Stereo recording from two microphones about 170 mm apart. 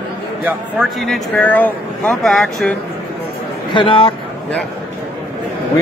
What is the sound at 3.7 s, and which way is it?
Speech, 30° left (ahead or behind).